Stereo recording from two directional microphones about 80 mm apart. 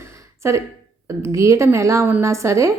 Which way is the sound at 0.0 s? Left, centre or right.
Right.